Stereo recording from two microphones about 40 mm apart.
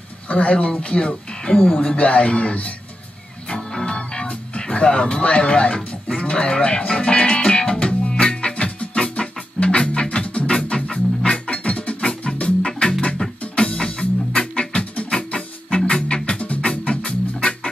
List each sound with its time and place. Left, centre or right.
0.3 s speech: left
3.5 s music: centre